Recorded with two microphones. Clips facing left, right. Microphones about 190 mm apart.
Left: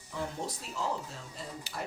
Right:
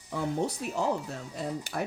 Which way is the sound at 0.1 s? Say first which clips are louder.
Right 7 dB; 65° right (ahead or behind).